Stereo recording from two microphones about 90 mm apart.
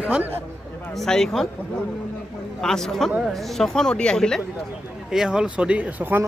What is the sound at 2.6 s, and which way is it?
Speech, 5° left (ahead or behind).